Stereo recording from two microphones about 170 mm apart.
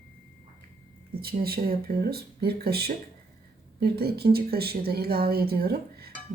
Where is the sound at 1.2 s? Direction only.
65° right (ahead or behind).